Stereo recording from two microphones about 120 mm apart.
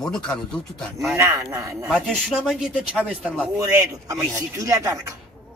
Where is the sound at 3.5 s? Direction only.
30° right (ahead or behind).